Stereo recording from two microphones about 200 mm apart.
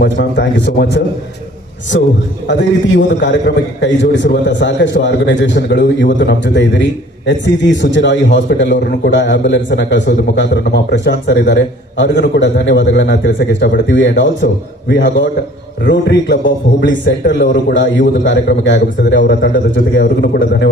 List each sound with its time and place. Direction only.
0.0 s a man's voice: 60° left (ahead or behind)